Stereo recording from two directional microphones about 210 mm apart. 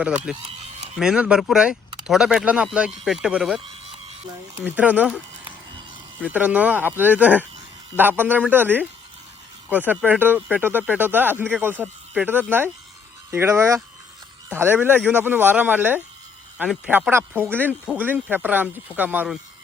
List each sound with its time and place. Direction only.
0.3 s speech: 5° right (ahead or behind)
0.6 s a sound: 30° right (ahead or behind)
0.9 s speech: 5° right (ahead or behind)
3.6 s a sound: 25° right (ahead or behind)
4.7 s speech: 5° right (ahead or behind)
6.3 s speech: 5° right (ahead or behind)